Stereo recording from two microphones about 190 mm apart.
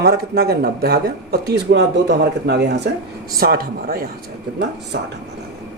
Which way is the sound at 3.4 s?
50° right (ahead or behind).